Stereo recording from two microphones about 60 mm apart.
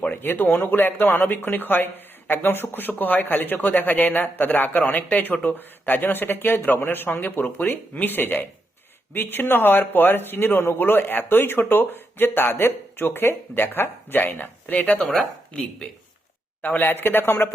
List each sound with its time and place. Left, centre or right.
0.0 s a sound: left
0.7 s speech: left
14.9 s speech: centre
16.6 s speech: left